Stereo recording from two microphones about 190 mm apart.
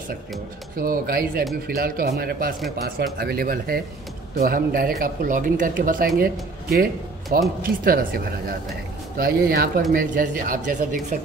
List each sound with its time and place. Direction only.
0.7 s speech: 50° right (ahead or behind)